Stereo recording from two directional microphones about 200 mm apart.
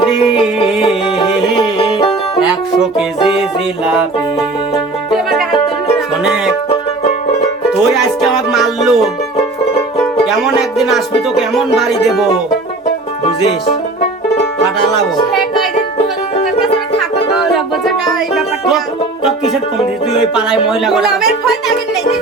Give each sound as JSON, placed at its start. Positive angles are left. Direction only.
{"t": 0.8, "sound": "music", "side_deg": 25}
{"t": 5.1, "sound": "music", "side_deg": 0}
{"t": 7.9, "sound": "music", "side_deg": 0}
{"t": 10.6, "sound": "music", "side_deg": 0}
{"t": 17.5, "sound": "music", "side_deg": 0}
{"t": 20.8, "sound": "music", "side_deg": 0}